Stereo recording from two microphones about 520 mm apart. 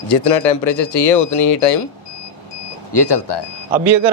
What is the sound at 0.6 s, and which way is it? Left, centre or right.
Speech, left.